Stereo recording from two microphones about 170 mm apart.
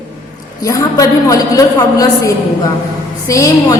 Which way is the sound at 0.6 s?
20° left (ahead or behind).